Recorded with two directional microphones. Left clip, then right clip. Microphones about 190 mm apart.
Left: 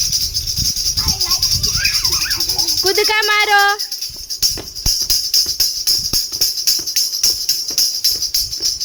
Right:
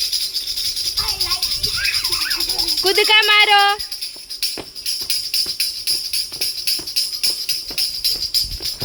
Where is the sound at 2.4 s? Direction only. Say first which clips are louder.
Left 2 dB; 60° left (ahead or behind).